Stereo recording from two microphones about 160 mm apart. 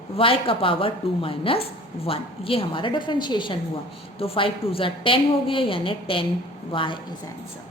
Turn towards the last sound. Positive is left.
turn(degrees=30)  # may be behind; listen again after turning